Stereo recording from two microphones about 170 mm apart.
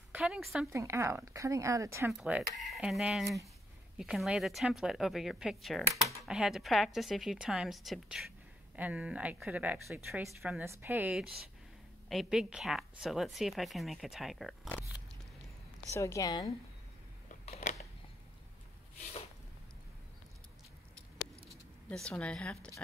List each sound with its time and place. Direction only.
0.1 s speech: 5° right (ahead or behind)
0.7 s speech: 15° right (ahead or behind)
2.1 s a woman's voice: 5° right (ahead or behind)
10.6 s a woman's voice: 15° right (ahead or behind); by 14.9 s 5° left (ahead or behind)
15.9 s a woman's voice: 15° left (ahead or behind)
17.3 s a sound: 45° left (ahead or behind)
21.5 s a sound: 5° left (ahead or behind)
22.1 s a woman's voice: 5° left (ahead or behind)